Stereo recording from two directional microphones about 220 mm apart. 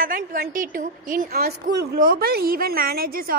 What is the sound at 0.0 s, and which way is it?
A woman's voice, 40° right (ahead or behind).